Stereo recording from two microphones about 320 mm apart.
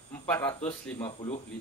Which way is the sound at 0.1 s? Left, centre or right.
Centre.